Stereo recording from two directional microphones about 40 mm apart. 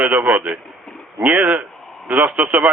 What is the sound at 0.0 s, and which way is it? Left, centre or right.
Speech, right.